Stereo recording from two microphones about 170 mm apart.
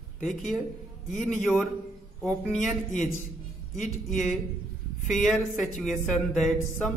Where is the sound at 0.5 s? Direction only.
Centre (ahead or behind).